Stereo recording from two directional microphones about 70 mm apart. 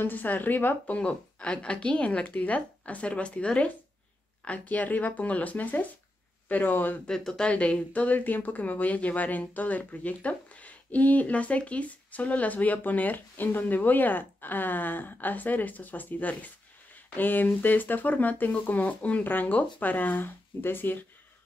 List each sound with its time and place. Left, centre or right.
0.0 s speech: left
0.9 s speech: centre
7.1 s speech: centre; by 21.0 s left